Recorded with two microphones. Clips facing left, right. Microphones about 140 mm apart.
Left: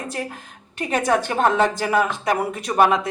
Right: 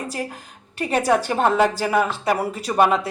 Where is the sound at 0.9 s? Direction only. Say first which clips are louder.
Right 1 dB; 5° right (ahead or behind).